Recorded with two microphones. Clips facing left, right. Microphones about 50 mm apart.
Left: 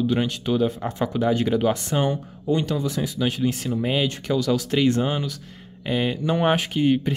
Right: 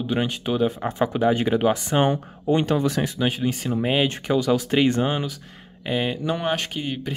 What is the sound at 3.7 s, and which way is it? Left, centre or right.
Speech, right.